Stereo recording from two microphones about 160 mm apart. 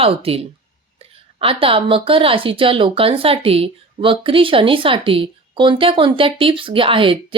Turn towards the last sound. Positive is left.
turn(degrees=-35)  # may be behind; listen again after turning